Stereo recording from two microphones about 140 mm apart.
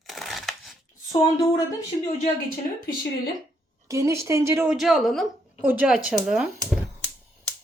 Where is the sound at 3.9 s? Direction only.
20° right (ahead or behind).